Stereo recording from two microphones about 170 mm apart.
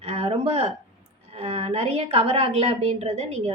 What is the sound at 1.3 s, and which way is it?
A woman's voice, 35° right (ahead or behind).